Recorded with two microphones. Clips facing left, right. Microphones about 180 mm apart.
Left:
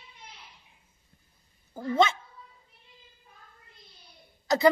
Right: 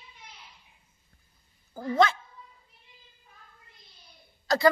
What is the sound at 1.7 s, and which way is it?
Speech, 20° left (ahead or behind).